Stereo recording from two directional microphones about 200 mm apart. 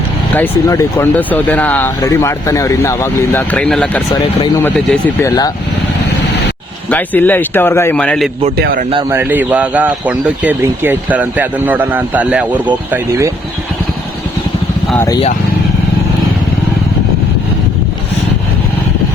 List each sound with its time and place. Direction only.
0.3 s speech: 15° left (ahead or behind)
4.1 s speech: 20° left (ahead or behind)
6.9 s speech: 10° left (ahead or behind)
8.5 s speech: 50° right (ahead or behind)
9.0 s speech: 10° right (ahead or behind)